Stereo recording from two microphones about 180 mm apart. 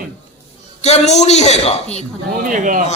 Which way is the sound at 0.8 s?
35° left (ahead or behind).